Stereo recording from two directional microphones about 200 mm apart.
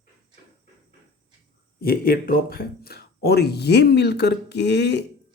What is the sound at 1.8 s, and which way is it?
Speech, 45° left (ahead or behind).